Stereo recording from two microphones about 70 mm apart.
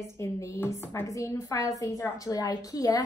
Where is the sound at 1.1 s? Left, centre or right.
Left.